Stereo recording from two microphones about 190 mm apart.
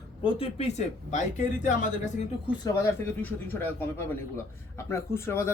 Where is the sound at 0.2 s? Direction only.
30° left (ahead or behind).